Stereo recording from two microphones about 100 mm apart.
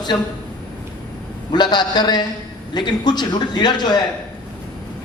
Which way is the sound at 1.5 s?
45° left (ahead or behind).